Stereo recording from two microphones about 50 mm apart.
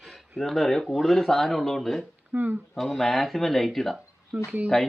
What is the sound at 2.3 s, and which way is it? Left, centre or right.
Speech, right.